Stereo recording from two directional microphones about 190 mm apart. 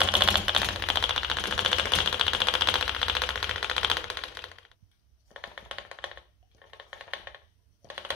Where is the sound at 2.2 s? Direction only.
Centre (ahead or behind).